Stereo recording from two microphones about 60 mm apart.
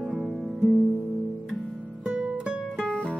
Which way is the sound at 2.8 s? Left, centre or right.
Centre.